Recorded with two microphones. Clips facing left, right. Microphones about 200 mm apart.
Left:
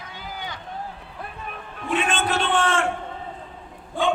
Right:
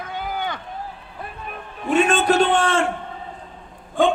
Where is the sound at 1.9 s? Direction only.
40° right (ahead or behind).